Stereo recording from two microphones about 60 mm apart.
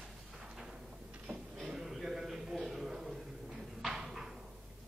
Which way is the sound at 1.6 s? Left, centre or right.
Centre.